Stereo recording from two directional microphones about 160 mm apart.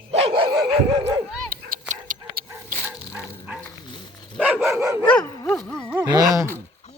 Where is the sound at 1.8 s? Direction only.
50° right (ahead or behind).